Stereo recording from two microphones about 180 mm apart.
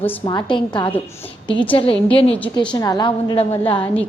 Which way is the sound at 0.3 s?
25° left (ahead or behind).